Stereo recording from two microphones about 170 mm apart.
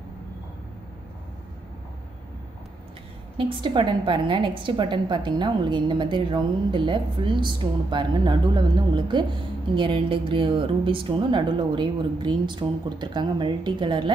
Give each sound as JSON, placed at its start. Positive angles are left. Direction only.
{"t": 3.3, "sound": "a woman's voice", "side_deg": -30}